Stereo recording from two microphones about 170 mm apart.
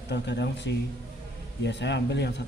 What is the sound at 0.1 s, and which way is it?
Speech, 90° left.